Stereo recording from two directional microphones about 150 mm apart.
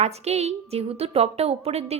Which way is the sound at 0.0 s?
45° right (ahead or behind).